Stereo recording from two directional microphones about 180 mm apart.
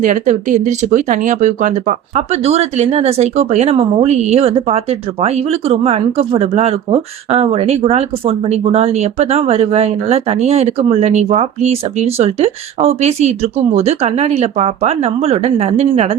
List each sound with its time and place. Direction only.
0.0 s speech: 45° right (ahead or behind)